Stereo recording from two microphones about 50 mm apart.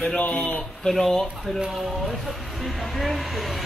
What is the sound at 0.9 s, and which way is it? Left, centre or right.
Speech, centre.